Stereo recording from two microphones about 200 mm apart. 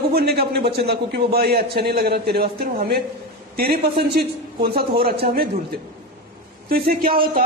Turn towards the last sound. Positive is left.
turn(degrees=-45)  # may be behind; listen again after turning